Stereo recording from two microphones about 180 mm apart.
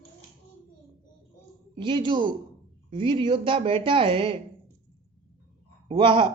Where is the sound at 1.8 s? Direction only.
25° right (ahead or behind).